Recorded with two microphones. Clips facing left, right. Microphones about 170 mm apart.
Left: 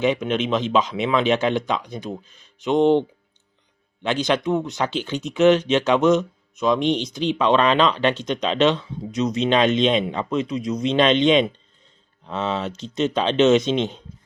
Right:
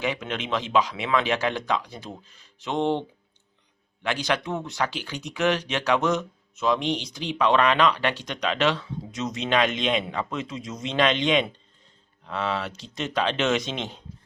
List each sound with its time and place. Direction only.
0.0 s speech: 20° left (ahead or behind)
4.0 s speech: 20° left (ahead or behind)